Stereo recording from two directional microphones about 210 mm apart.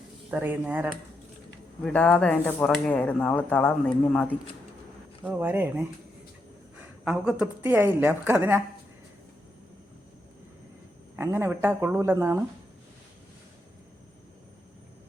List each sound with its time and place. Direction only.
0.3 s a woman's voice: 10° right (ahead or behind)
1.8 s speech: 5° left (ahead or behind)
5.2 s a woman's voice: 10° right (ahead or behind)
11.2 s a woman's voice: 10° right (ahead or behind)